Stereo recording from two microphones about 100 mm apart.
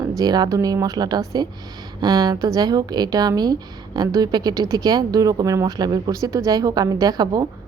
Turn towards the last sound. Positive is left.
turn(degrees=-45)  # may be behind; listen again after turning